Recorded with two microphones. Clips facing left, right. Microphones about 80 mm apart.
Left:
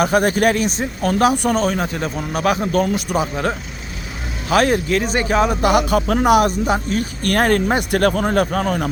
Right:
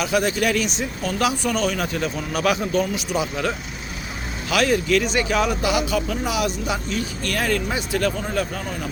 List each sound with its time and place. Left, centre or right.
0.0 s speech: left
4.4 s speech: left
5.7 s speech: left